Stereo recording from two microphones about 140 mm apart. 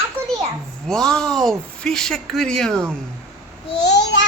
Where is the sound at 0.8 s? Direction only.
5° left (ahead or behind).